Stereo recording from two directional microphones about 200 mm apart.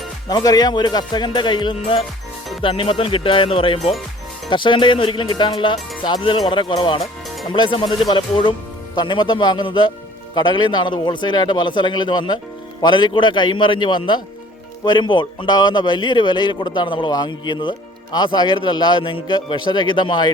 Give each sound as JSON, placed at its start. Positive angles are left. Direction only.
{"t": 0.3, "sound": "a man's voice", "side_deg": 20}